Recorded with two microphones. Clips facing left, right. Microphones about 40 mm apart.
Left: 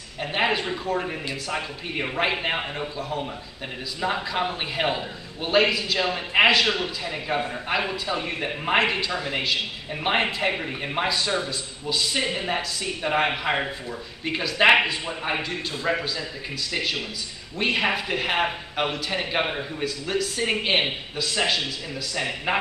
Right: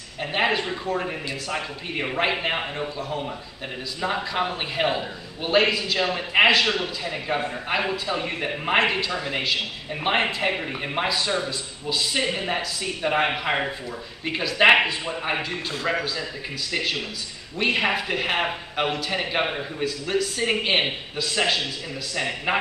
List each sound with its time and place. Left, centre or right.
0.2 s a man's voice: centre
15.8 s a man's voice: centre
16.7 s a man's voice: centre